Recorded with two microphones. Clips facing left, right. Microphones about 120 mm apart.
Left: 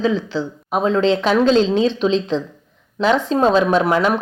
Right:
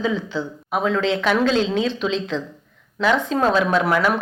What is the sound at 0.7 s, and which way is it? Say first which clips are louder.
A woman's voice: left 4 dB; 30° left (ahead or behind).